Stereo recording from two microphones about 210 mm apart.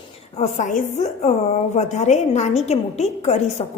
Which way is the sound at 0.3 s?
35° left (ahead or behind).